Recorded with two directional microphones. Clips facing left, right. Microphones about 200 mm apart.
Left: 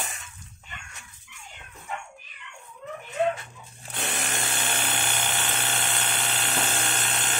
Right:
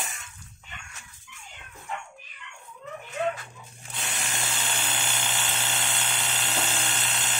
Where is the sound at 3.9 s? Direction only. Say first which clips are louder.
Left 4 dB; 60° left (ahead or behind).